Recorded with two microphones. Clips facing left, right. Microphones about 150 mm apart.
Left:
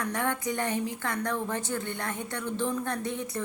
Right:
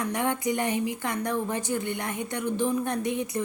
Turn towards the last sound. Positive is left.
turn(degrees=-15)  # may be behind; listen again after turning